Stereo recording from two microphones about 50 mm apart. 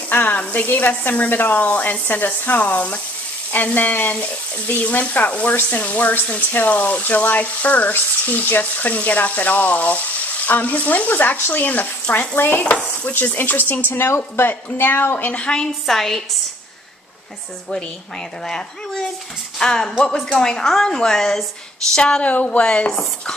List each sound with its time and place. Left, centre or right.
0.1 s speech: left
12.6 s stir: left
13.1 s speech: left
13.9 s a woman's voice: left
14.5 s speech: left
15.3 s speech: centre
15.9 s a woman's voice: centre
19.6 s a woman's voice: centre
22.2 s speech: left